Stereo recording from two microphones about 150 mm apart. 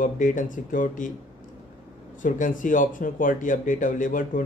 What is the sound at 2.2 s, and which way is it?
Speech, 60° left (ahead or behind).